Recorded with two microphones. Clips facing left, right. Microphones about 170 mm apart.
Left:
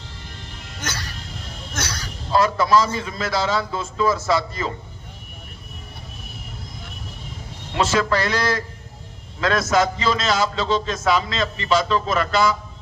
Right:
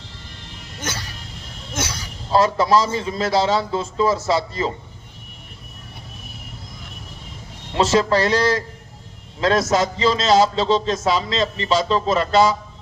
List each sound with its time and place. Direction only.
0.8 s music: 25° right (ahead or behind)
1.7 s a man's voice: 25° right (ahead or behind)
7.7 s a man's voice: 35° right (ahead or behind)